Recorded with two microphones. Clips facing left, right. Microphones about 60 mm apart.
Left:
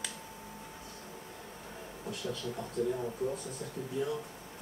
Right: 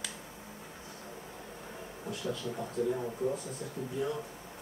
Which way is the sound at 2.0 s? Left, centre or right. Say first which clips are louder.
Right 1 dB; centre.